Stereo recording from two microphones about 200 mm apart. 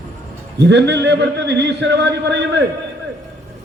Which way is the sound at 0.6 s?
60° right (ahead or behind).